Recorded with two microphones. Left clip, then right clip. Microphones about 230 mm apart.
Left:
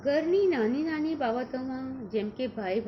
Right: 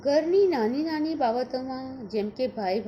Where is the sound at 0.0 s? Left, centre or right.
Right.